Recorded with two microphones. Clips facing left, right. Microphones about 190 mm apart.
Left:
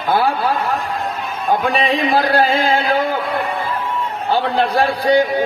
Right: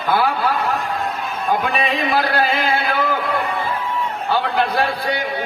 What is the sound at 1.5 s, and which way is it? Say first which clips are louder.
A man's voice: left 4 dB; 40° left (ahead or behind).